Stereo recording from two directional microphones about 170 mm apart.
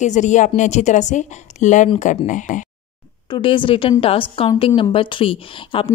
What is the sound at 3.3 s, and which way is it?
Speech, 30° left (ahead or behind).